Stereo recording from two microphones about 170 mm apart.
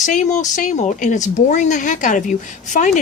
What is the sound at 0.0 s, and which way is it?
Speech, 45° left (ahead or behind).